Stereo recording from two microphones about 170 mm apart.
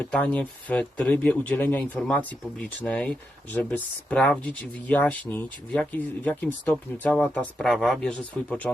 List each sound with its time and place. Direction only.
0.0 s speech: 10° left (ahead or behind)